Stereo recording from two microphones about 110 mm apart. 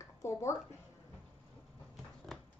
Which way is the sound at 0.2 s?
25° left (ahead or behind).